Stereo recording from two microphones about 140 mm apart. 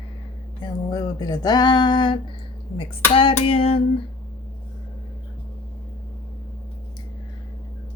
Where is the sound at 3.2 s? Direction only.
40° left (ahead or behind).